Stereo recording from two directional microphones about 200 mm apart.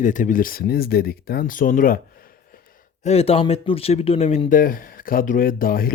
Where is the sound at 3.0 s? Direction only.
30° left (ahead or behind); by 5.9 s 45° left (ahead or behind).